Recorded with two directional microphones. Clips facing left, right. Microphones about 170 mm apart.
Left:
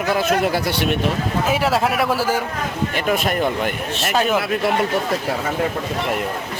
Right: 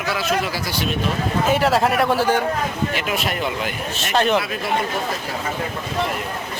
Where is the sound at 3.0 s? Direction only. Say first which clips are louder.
Left 4 dB; 50° left (ahead or behind).